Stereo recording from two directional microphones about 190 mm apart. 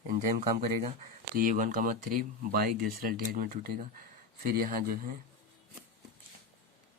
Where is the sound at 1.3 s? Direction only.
45° right (ahead or behind).